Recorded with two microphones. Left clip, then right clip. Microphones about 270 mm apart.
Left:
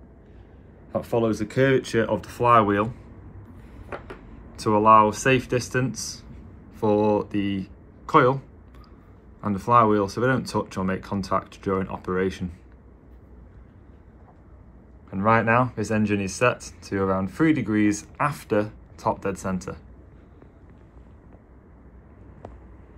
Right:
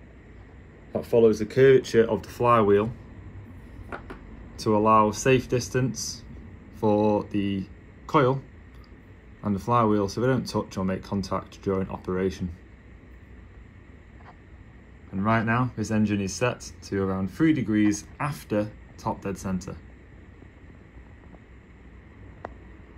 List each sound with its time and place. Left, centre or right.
1.0 s speech: centre
2.4 s speech: left
4.8 s speech: centre
15.1 s speech: centre